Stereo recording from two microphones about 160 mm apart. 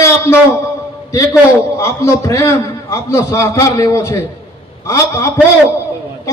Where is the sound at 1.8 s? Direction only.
15° left (ahead or behind).